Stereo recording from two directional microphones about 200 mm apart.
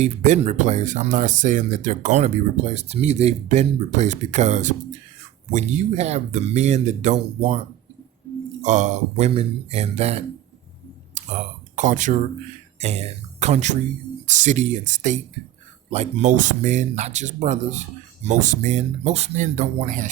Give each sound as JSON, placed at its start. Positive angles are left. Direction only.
{"t": 0.0, "sound": "speech", "side_deg": -35}
{"t": 8.6, "sound": "speech", "side_deg": -35}
{"t": 11.2, "sound": "a sound", "side_deg": -35}
{"t": 11.8, "sound": "speech", "side_deg": -40}